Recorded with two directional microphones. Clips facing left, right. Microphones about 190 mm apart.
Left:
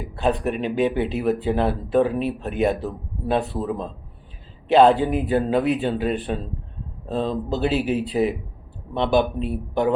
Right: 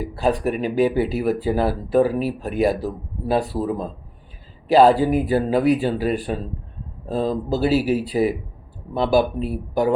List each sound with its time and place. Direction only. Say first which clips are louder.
0.0 s speech: right 2 dB; centre (ahead or behind)